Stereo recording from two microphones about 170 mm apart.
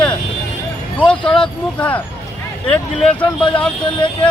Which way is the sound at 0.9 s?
5° left (ahead or behind).